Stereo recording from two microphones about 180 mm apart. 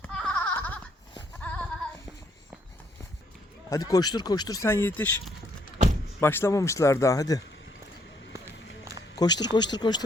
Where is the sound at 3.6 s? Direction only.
20° left (ahead or behind).